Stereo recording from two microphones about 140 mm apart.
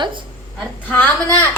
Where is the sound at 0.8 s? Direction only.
10° left (ahead or behind).